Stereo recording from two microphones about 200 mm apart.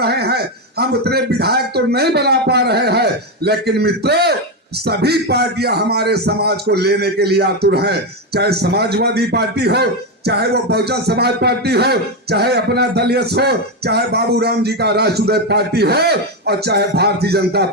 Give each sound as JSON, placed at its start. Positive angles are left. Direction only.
{"t": 0.0, "sound": "a man's voice", "side_deg": -55}